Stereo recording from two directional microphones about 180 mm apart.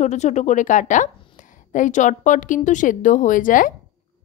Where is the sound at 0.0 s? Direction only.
40° left (ahead or behind).